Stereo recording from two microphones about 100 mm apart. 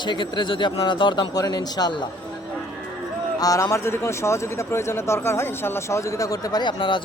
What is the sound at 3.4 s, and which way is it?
Speech, 35° left (ahead or behind).